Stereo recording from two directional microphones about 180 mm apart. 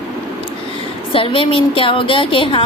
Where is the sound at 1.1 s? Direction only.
30° left (ahead or behind).